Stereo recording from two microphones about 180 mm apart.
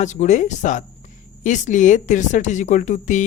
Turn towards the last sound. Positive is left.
turn(degrees=45)  # may be behind; listen again after turning